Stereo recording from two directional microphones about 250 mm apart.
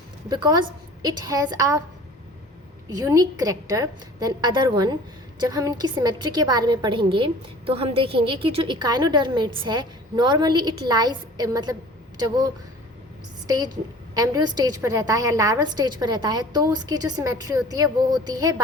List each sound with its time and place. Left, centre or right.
0.3 s a woman's voice: centre
2.9 s a woman's voice: centre
14.1 s a woman's voice: centre